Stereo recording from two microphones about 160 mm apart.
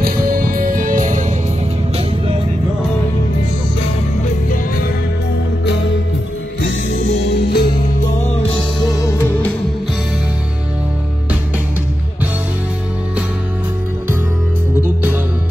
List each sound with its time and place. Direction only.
0.0 s music: 60° right (ahead or behind)
6.9 s music: 90° left
9.0 s music: 15° left (ahead or behind)